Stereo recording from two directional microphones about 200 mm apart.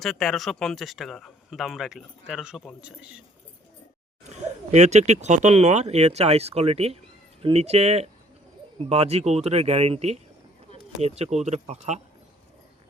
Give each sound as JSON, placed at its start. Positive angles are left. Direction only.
{"t": 0.0, "sound": "speech", "side_deg": 0}
{"t": 4.2, "sound": "speech", "side_deg": -35}